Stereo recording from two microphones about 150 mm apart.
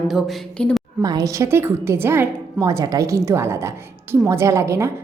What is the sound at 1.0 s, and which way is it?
A woman's voice, 25° right (ahead or behind).